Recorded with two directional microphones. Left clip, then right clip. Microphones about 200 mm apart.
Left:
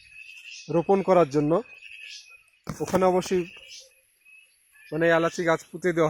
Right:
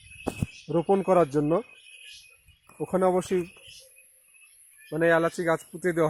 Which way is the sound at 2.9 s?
10° left (ahead or behind).